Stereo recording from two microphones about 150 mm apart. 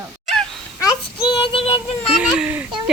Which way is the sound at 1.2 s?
35° left (ahead or behind).